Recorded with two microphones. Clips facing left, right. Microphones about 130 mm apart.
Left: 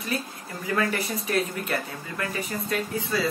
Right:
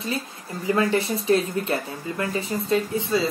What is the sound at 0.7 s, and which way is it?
Speech, 25° right (ahead or behind).